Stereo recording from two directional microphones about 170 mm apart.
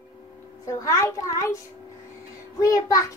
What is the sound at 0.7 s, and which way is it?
Speech, 20° left (ahead or behind).